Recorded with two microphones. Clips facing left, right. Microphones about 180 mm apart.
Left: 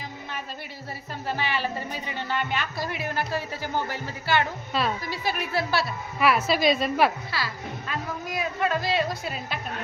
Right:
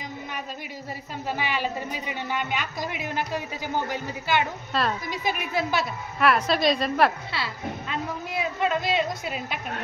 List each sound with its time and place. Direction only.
1.3 s speech: 15° right (ahead or behind)
4.7 s a woman's voice: centre (ahead or behind)
5.1 s speech: 15° right (ahead or behind)
6.1 s a woman's voice: 5° left (ahead or behind)
7.3 s speech: 25° right (ahead or behind)